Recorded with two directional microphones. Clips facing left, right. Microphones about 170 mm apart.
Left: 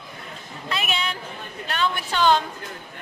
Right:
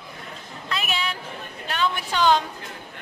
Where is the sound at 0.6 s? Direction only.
Centre (ahead or behind).